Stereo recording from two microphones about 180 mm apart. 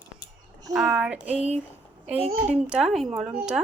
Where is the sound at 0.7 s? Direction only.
5° right (ahead or behind).